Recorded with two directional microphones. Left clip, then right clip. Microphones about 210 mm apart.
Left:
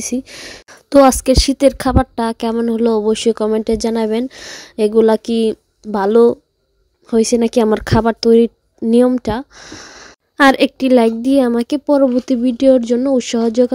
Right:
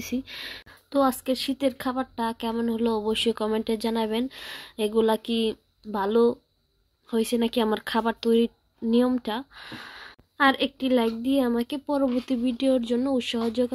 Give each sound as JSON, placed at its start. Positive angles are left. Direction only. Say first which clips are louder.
{"t": 0.0, "sound": "speech", "louder": "left 9 dB", "side_deg": 40}